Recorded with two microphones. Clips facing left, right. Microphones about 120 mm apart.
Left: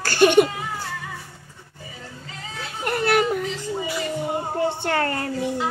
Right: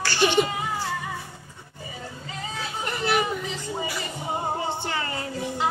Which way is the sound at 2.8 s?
60° left (ahead or behind).